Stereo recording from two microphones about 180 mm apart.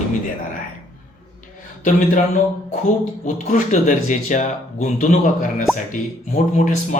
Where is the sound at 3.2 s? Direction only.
45° left (ahead or behind).